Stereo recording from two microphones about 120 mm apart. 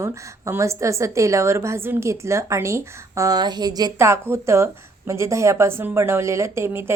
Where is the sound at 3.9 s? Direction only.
20° right (ahead or behind).